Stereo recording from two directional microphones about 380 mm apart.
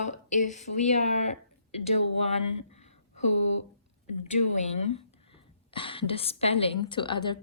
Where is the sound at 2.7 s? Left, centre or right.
Centre.